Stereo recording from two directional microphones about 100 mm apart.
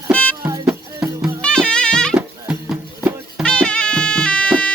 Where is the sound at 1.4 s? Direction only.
10° left (ahead or behind).